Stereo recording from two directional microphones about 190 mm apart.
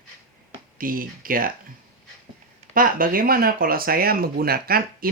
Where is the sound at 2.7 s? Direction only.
45° right (ahead or behind).